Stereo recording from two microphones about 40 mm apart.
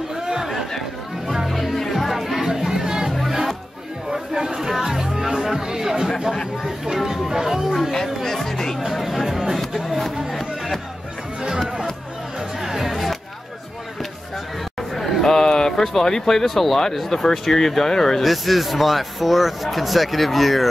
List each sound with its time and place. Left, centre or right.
0.1 s chatter: centre
0.5 s chatter: centre
1.5 s music: centre
6.8 s chatter: centre
7.9 s chatter: centre
8.7 s chatter: centre
9.8 s music: centre
12.4 s music: centre
14.8 s a sound: centre
16.4 s speech: centre
18.2 s speech: centre